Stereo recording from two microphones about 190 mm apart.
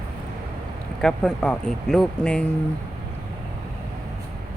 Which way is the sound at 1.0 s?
5° left (ahead or behind).